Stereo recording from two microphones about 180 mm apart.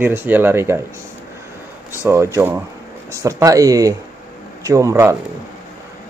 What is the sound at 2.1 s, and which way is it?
Speech, 15° right (ahead or behind).